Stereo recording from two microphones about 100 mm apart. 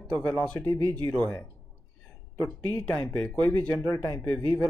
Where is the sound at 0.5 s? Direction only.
30° left (ahead or behind).